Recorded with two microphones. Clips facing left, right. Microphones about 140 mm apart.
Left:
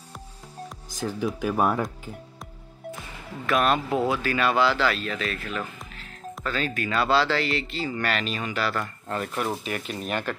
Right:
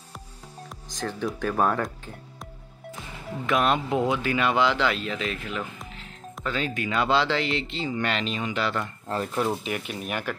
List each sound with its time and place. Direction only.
0.8 s speech: 10° left (ahead or behind)
3.4 s speech: 20° right (ahead or behind)